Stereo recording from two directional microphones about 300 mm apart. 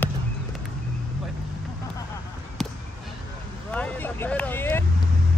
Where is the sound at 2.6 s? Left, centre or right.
Centre.